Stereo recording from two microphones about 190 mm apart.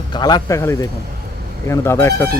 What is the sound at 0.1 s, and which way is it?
Speech, 20° left (ahead or behind).